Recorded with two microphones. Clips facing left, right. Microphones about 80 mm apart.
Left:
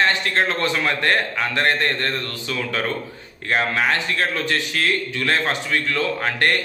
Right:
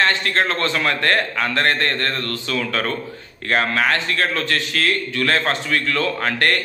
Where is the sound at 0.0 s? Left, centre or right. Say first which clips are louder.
Right 1 dB; centre.